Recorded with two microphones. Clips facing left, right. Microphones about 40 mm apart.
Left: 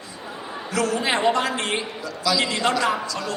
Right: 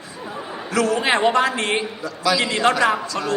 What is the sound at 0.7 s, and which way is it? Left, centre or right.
A man's voice, right.